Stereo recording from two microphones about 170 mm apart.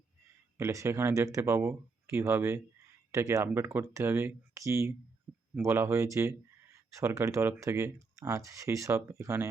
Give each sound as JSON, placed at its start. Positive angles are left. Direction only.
{"t": 0.5, "sound": "speech", "side_deg": -20}